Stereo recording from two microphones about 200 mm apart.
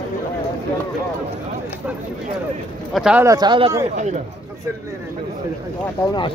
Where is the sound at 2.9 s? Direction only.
5° right (ahead or behind).